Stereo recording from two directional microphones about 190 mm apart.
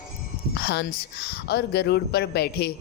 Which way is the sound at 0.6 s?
60° left (ahead or behind).